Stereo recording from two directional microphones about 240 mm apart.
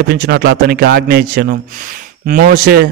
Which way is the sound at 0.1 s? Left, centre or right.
Right.